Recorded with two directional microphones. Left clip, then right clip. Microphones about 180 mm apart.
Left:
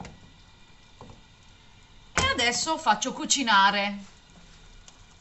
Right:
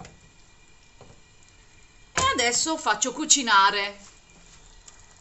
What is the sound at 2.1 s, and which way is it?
Speech, 45° right (ahead or behind).